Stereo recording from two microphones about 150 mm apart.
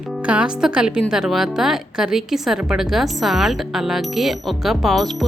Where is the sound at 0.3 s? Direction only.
5° right (ahead or behind).